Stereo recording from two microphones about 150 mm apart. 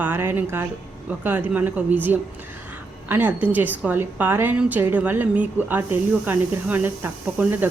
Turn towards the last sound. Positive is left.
turn(degrees=-10)  # may be behind; listen again after turning